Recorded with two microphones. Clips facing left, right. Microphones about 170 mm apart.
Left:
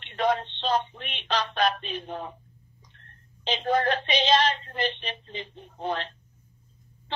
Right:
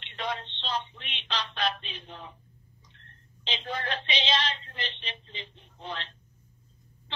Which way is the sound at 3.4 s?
50° left (ahead or behind).